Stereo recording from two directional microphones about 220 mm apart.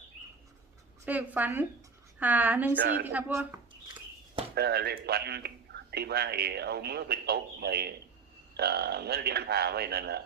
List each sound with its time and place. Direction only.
1.0 s a woman's voice: 5° right (ahead or behind)
4.5 s speech: 45° right (ahead or behind)